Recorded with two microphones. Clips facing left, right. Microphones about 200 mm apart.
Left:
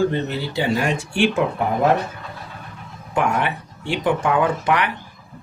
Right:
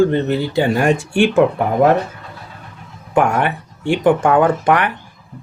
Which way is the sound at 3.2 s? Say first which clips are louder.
Right 5 dB; 50° right (ahead or behind).